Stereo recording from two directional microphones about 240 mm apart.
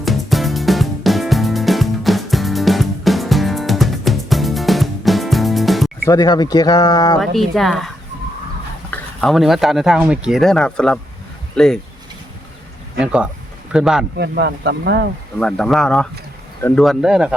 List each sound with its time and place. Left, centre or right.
0.0 s music: centre
6.1 s speech: centre
7.2 s speech: centre
8.9 s speech: centre
13.0 s speech: centre
14.2 s speech: right
15.4 s speech: centre